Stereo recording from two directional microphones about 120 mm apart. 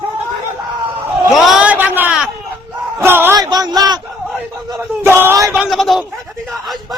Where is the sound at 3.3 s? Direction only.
30° right (ahead or behind).